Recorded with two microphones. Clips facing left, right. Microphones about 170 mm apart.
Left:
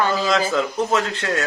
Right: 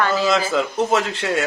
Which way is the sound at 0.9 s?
10° right (ahead or behind).